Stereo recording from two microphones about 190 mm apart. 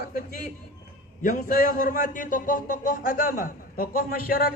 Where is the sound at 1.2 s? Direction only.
40° left (ahead or behind).